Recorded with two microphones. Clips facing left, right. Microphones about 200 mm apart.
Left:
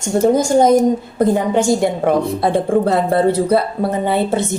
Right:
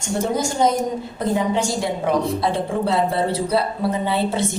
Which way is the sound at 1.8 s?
55° left (ahead or behind).